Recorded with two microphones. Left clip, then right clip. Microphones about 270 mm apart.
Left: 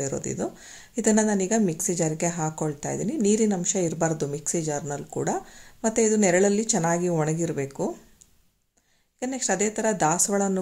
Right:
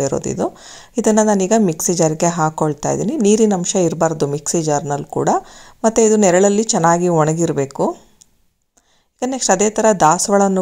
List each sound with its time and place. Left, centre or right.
0.0 s speech: centre
9.2 s speech: centre